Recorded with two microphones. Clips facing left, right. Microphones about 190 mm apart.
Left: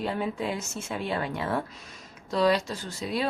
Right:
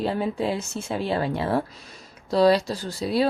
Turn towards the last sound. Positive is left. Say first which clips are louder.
# right 7 dB
turn(degrees=-35)  # may be behind; listen again after turning